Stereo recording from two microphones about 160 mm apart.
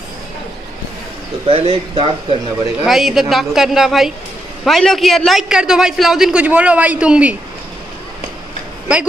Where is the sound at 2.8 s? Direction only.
Centre (ahead or behind).